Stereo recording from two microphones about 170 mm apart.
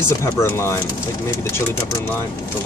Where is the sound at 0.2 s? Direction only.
15° left (ahead or behind).